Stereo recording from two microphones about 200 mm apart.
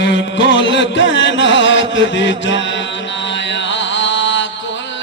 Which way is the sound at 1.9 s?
65° left (ahead or behind).